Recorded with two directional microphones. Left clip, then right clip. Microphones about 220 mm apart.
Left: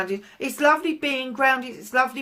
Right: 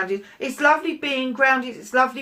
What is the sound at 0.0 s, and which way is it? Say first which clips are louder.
Speech: right 2 dB; 45° left (ahead or behind).